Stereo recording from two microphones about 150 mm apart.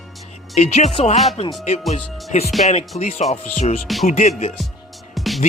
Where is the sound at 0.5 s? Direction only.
50° left (ahead or behind).